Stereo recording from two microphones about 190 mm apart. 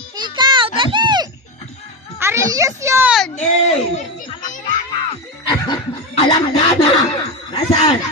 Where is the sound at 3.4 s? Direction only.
40° left (ahead or behind).